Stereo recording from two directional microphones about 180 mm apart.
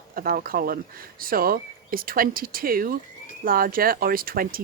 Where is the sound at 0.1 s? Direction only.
55° right (ahead or behind).